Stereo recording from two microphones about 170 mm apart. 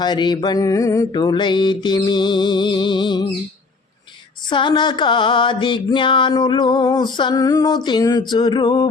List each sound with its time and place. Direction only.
0.0 s music: 25° left (ahead or behind)
4.4 s music: 25° left (ahead or behind)